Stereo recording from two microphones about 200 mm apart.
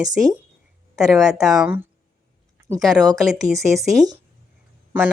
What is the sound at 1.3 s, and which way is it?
Speech, centre (ahead or behind).